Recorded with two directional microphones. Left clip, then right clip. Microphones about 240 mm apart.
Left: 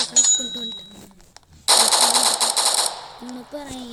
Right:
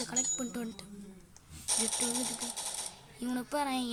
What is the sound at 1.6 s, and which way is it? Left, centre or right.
Machine gun, left.